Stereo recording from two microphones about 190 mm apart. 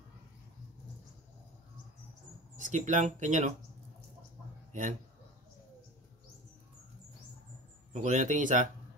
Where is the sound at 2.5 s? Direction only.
40° right (ahead or behind).